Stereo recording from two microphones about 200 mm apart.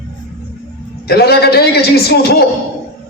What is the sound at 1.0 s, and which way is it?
A man's voice, 55° left (ahead or behind).